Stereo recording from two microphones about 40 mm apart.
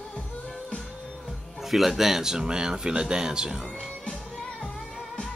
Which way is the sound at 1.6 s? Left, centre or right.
Centre.